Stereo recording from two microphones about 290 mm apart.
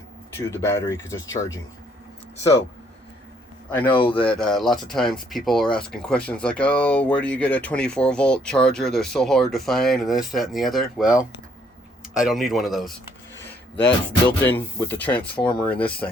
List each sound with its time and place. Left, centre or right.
0.3 s speech: centre
3.9 s speech: centre
4.2 s speech: centre